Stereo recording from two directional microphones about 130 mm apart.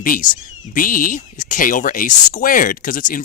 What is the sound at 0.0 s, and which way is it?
Speech, 90° left.